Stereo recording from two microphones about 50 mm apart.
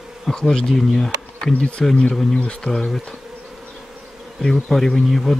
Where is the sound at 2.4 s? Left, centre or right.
Left.